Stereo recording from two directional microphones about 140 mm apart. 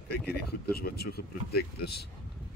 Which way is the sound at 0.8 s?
90° left.